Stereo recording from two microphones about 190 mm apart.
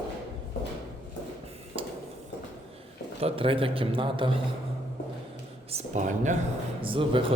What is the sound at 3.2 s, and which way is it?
Speech, 30° right (ahead or behind).